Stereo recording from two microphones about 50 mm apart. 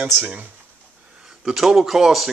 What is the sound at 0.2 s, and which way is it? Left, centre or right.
Speech, right.